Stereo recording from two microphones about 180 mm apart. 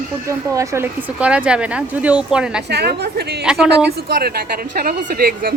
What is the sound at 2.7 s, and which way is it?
Speech, 65° right (ahead or behind).